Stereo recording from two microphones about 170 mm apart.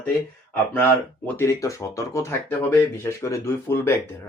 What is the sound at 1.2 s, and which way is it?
Speech, 10° left (ahead or behind).